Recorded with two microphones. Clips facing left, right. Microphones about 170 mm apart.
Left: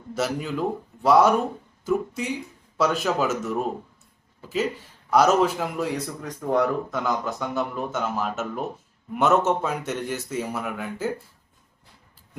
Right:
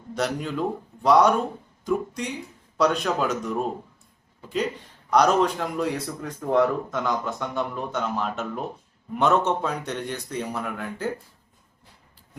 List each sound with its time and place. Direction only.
0.1 s a man's voice: 5° left (ahead or behind)
5.1 s a man's voice: 5° left (ahead or behind)